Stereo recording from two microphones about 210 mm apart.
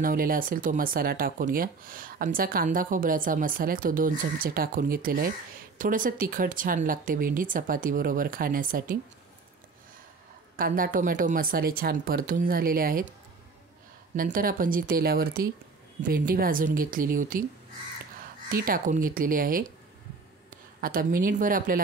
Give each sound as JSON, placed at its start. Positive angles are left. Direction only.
{"t": 0.0, "sound": "speech", "side_deg": -40}
{"t": 10.5, "sound": "a woman's voice", "side_deg": -40}
{"t": 14.1, "sound": "speech", "side_deg": -40}
{"t": 18.5, "sound": "speech", "side_deg": -40}